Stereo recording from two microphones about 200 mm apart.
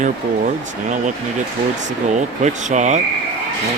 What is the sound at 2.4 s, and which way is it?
Speech, 35° right (ahead or behind).